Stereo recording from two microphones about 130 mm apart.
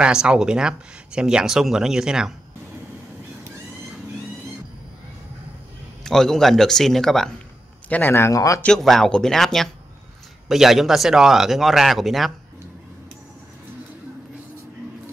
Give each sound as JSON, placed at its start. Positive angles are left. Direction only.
{"t": 0.0, "sound": "speech", "side_deg": -5}
{"t": 6.0, "sound": "speech", "side_deg": 5}
{"t": 7.9, "sound": "speech", "side_deg": 15}
{"t": 8.5, "sound": "speech", "side_deg": 5}